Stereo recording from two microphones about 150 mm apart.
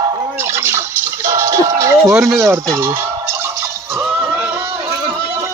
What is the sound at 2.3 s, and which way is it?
Speech, 20° right (ahead or behind).